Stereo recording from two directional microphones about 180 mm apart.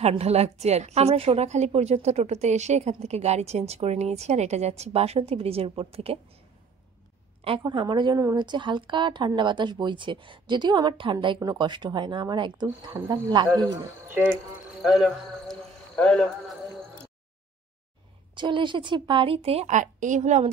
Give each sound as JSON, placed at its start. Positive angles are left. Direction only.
{"t": 0.0, "sound": "a woman's voice", "side_deg": -35}
{"t": 7.4, "sound": "a woman's voice", "side_deg": -30}
{"t": 13.5, "sound": "a man's voice", "side_deg": -15}
{"t": 14.8, "sound": "a man's voice", "side_deg": 0}
{"t": 18.3, "sound": "a woman's voice", "side_deg": -25}